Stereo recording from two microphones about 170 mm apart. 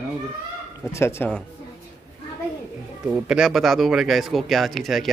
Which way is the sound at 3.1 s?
5° right (ahead or behind).